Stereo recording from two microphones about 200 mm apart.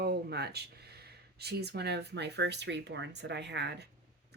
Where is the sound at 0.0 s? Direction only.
55° right (ahead or behind).